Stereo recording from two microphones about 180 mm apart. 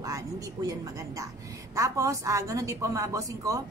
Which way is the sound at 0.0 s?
20° right (ahead or behind).